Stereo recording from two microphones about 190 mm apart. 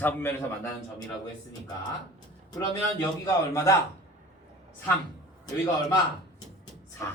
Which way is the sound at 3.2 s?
15° left (ahead or behind).